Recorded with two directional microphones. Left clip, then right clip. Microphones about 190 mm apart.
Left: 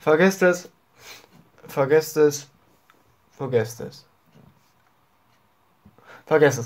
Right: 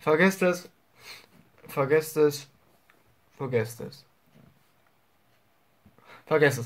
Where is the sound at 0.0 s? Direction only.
10° right (ahead or behind).